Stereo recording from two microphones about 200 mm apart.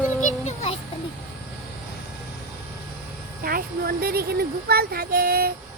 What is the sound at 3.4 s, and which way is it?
Speech, 45° right (ahead or behind).